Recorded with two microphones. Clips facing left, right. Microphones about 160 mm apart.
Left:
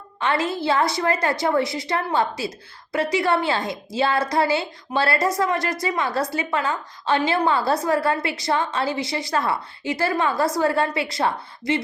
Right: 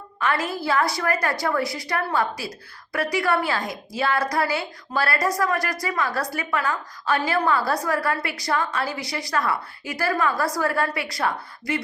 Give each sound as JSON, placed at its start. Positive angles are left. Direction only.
{"t": 0.2, "sound": "a woman's voice", "side_deg": 25}